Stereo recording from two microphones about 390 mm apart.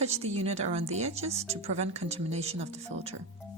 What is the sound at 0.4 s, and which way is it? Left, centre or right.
Speech, centre.